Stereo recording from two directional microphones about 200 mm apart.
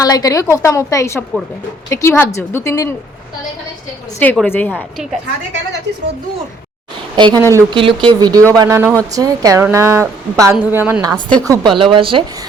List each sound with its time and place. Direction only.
0.0 s a woman's voice: 20° left (ahead or behind)
4.2 s a woman's voice: 10° left (ahead or behind)
4.7 s a woman's voice: 5° right (ahead or behind)
7.2 s speech: 20° right (ahead or behind)